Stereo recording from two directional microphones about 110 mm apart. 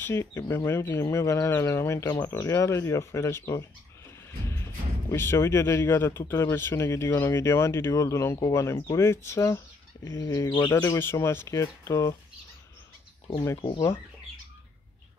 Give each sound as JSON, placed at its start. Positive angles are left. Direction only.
{"t": 0.0, "sound": "speech", "side_deg": 25}
{"t": 5.1, "sound": "speech", "side_deg": 20}
{"t": 13.6, "sound": "speech", "side_deg": 50}